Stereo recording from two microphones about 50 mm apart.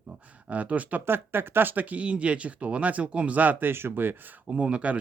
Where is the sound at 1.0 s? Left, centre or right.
Right.